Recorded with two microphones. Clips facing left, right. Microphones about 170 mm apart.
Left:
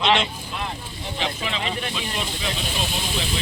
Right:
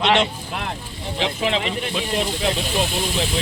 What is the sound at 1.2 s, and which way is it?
Speech, 75° right (ahead or behind).